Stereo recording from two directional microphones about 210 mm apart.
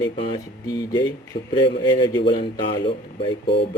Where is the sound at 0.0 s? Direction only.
20° left (ahead or behind).